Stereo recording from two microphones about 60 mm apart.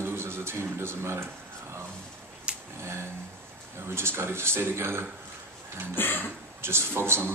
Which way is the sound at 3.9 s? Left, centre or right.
Right.